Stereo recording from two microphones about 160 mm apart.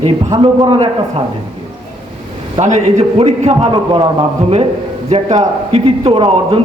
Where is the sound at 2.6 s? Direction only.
45° right (ahead or behind).